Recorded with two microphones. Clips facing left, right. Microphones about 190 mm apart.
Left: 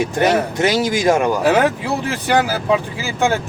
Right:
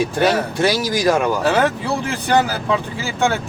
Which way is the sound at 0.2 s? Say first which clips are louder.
Left 2 dB; 20° left (ahead or behind).